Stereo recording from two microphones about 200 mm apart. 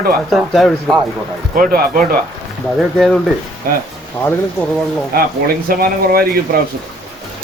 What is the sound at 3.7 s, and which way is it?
Speech, 45° right (ahead or behind).